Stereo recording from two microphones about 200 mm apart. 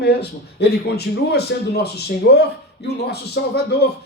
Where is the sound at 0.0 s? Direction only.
55° left (ahead or behind).